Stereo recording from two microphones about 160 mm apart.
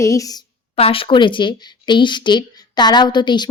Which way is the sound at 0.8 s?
35° left (ahead or behind).